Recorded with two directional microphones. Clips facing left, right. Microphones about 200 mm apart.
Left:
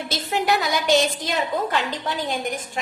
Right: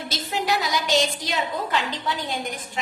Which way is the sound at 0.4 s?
60° left (ahead or behind).